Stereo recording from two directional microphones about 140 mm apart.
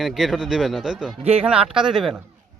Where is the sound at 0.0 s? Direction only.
Centre (ahead or behind).